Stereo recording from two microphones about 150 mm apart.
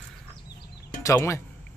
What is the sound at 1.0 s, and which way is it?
Speech, 20° left (ahead or behind).